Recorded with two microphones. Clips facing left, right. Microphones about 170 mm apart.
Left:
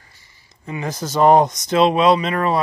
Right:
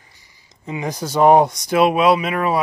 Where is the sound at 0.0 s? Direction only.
15° right (ahead or behind).